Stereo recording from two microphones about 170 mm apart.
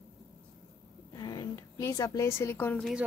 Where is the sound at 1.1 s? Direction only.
25° left (ahead or behind).